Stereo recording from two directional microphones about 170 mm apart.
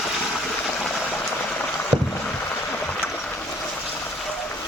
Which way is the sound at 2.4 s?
15° left (ahead or behind).